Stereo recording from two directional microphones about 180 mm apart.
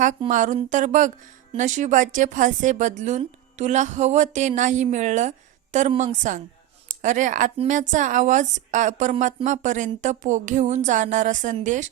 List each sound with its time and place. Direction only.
0.3 s a woman's voice: 45° right (ahead or behind)
7.0 s a woman's voice: 45° right (ahead or behind)